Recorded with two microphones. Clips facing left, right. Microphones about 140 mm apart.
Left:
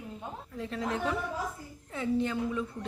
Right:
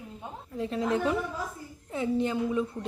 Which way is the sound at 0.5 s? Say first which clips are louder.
Right 6 dB; 20° right (ahead or behind).